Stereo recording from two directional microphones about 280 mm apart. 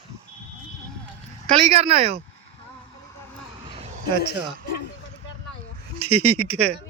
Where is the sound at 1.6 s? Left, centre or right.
Right.